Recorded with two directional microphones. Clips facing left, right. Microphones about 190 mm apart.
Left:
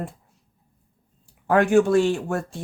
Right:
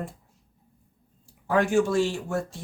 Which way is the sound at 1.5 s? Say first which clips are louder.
Left 5 dB; 60° left (ahead or behind).